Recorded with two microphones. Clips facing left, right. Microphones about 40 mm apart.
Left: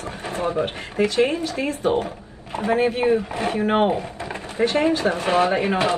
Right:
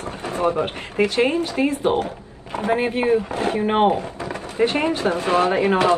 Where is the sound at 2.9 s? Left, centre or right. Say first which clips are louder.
Right 1 dB; centre.